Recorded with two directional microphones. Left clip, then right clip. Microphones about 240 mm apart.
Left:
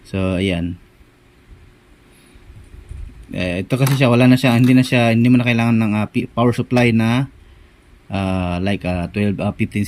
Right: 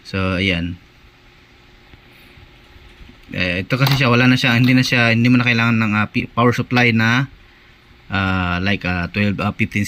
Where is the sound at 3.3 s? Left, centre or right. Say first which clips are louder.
Right 2 dB; centre.